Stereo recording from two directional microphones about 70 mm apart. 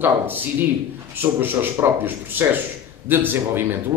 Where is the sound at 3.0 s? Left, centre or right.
Right.